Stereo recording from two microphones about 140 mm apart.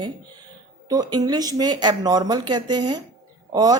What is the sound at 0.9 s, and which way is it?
Speech, 25° right (ahead or behind).